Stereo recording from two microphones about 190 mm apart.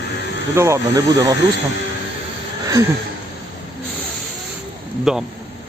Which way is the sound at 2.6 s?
15° right (ahead or behind).